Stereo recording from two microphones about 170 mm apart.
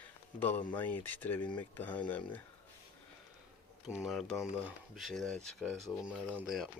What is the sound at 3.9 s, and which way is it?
Speech, 5° right (ahead or behind).